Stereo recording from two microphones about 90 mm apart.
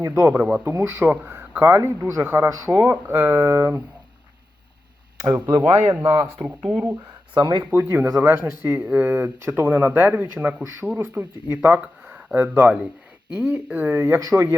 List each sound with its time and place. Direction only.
0.1 s speech: 15° right (ahead or behind)
0.5 s speech: 30° right (ahead or behind)
5.2 s speech: 45° right (ahead or behind)
6.4 s speech: 15° right (ahead or behind)
7.3 s speech: 60° right (ahead or behind)
7.6 s speech: 25° right (ahead or behind)
14.2 s speech: 40° right (ahead or behind)